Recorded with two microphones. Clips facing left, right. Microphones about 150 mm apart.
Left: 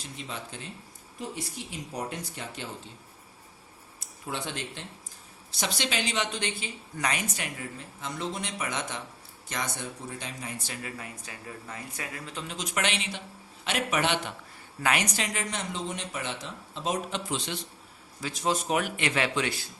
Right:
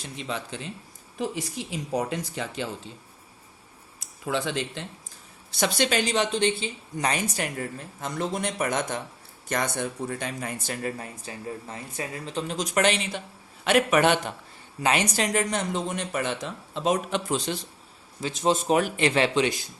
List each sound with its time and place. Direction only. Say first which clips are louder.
1.2 s speech: right 7 dB; 90° right
4.3 s speech: right 7 dB; 90° right
5.5 s speech: right 7 dB; 60° right (ahead or behind); by 13.2 s 40° right (ahead or behind)
13.7 s speech: right 8 dB; 55° right (ahead or behind)
14.8 s speech: right 4 dB; 25° right (ahead or behind)
15.1 s speech: right 8 dB; 40° right (ahead or behind); by 17.3 s 60° right (ahead or behind)
17.3 s speech: right 5 dB; 40° right (ahead or behind)
18.2 s speech: right 5 dB; 25° right (ahead or behind)